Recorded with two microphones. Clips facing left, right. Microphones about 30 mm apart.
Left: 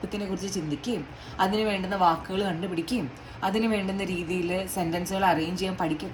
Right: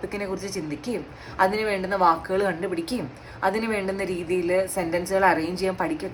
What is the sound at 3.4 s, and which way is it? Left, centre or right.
A woman's voice, right.